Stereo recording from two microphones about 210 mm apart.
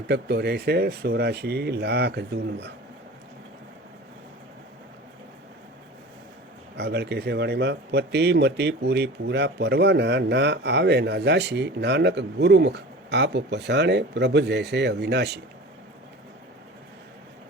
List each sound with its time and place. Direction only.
0.1 s speech: 50° right (ahead or behind)
6.7 s speech: 50° right (ahead or behind)